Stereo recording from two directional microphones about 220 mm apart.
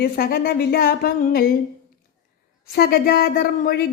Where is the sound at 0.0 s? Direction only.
45° left (ahead or behind).